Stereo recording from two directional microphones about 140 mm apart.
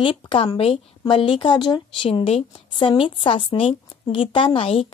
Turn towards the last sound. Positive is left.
turn(degrees=40)  # may be behind; listen again after turning